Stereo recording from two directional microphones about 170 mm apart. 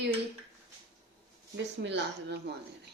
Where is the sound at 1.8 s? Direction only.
85° right.